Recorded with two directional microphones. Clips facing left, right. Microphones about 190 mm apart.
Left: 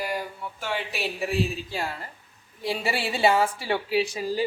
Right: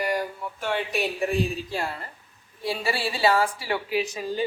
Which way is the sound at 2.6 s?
20° left (ahead or behind).